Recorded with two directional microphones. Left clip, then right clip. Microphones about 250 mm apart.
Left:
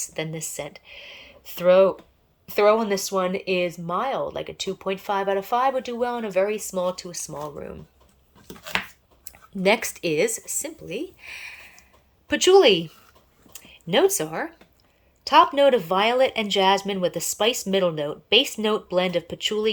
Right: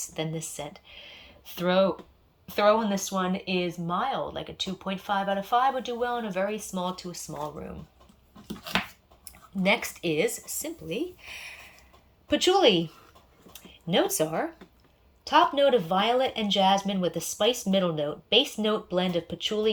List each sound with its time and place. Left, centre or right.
0.0 s speech: centre
3.1 s speech: left
3.8 s speech: centre
8.4 s dog: centre
9.2 s speech: left
13.5 s a sound: centre
15.2 s speech: centre